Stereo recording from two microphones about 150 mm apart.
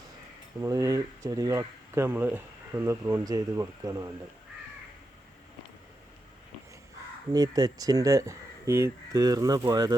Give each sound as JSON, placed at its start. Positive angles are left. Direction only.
{"t": 0.6, "sound": "speech", "side_deg": -20}
{"t": 7.3, "sound": "speech", "side_deg": -25}